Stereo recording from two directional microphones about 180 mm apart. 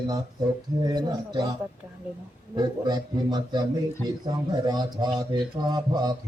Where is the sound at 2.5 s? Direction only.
25° right (ahead or behind).